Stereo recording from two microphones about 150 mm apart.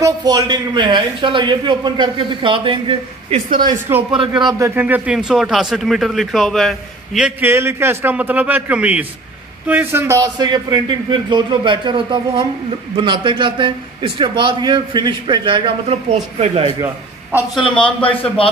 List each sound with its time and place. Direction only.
0.0 s a man's voice: 25° right (ahead or behind)
3.3 s speech: 65° right (ahead or behind)
4.1 s a man's voice: 30° right (ahead or behind)
17.6 s a man's voice: 35° left (ahead or behind)